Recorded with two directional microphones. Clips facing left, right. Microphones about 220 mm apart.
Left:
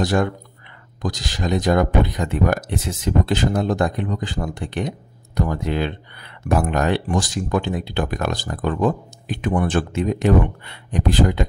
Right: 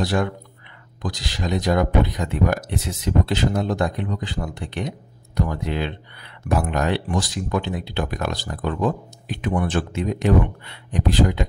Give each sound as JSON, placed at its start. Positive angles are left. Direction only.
{"t": 0.0, "sound": "speech", "side_deg": 45}